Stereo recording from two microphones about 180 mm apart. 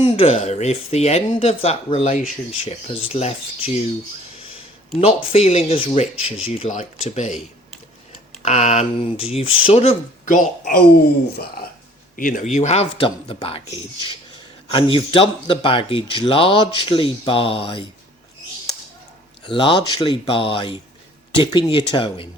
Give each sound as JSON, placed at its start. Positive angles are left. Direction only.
{"t": 0.0, "sound": "speech", "side_deg": 30}
{"t": 4.9, "sound": "speech", "side_deg": 35}
{"t": 8.4, "sound": "speech", "side_deg": 40}
{"t": 12.5, "sound": "speech", "side_deg": 35}
{"t": 14.7, "sound": "speech", "side_deg": 30}
{"t": 19.5, "sound": "speech", "side_deg": 30}